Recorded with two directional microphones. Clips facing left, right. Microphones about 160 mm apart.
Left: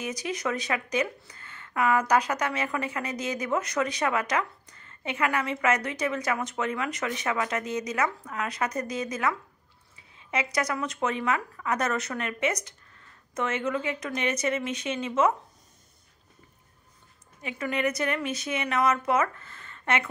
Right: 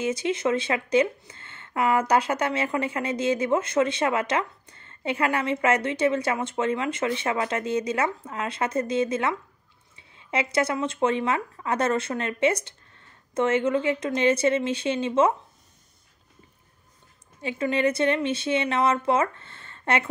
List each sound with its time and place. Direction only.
0.0 s speech: 25° right (ahead or behind)
17.4 s speech: 30° right (ahead or behind)